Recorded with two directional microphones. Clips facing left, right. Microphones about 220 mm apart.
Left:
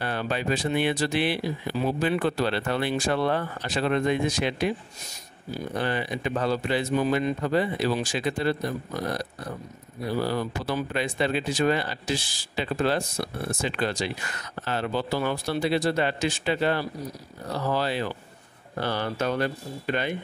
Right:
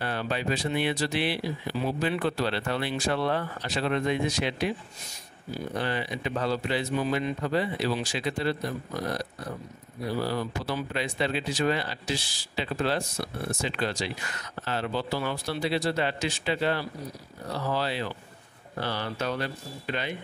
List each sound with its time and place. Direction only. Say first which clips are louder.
0.0 s speech: left 2 dB; 50° left (ahead or behind)
5.8 s speech: left 3 dB; 50° left (ahead or behind)
10.2 s speech: left 2 dB; 50° left (ahead or behind)